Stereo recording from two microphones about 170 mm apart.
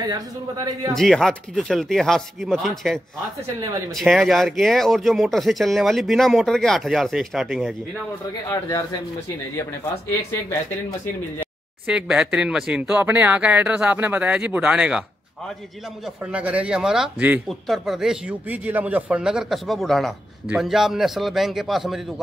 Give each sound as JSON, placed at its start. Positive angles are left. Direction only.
{"t": 0.1, "sound": "a man's voice", "side_deg": -20}
{"t": 0.9, "sound": "speech", "side_deg": 0}
{"t": 8.5, "sound": "speech", "side_deg": 20}
{"t": 11.8, "sound": "speech", "side_deg": -5}
{"t": 16.3, "sound": "speech", "side_deg": -10}